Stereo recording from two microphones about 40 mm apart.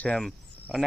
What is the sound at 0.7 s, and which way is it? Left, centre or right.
Speech, centre.